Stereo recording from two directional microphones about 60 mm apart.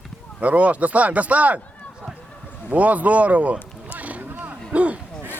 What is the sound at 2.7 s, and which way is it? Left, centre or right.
Speech, right.